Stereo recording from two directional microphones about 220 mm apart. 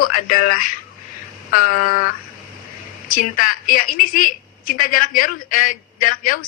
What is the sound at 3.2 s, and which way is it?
A woman's voice, 40° left (ahead or behind).